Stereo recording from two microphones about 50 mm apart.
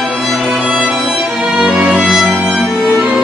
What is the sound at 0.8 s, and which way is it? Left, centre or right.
Music, centre.